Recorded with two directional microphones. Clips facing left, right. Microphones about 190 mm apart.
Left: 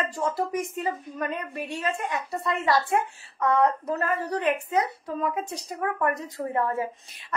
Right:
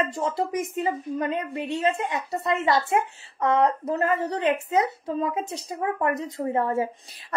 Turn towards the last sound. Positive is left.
turn(degrees=-30)  # may be behind; listen again after turning